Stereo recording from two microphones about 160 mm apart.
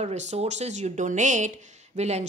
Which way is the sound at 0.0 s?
45° right (ahead or behind).